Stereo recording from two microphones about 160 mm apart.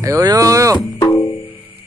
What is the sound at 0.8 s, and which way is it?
Music, 20° left (ahead or behind).